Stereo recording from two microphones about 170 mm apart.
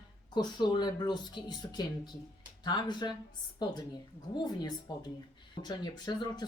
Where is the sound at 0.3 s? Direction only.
25° left (ahead or behind).